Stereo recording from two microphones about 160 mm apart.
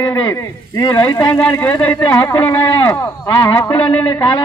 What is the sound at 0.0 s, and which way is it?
Speech, 15° left (ahead or behind).